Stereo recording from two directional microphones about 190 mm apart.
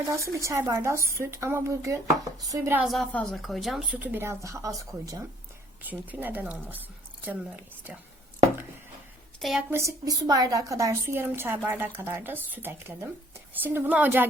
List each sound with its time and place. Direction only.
0.1 s a woman's voice: 15° right (ahead or behind)
9.4 s a woman's voice: centre (ahead or behind)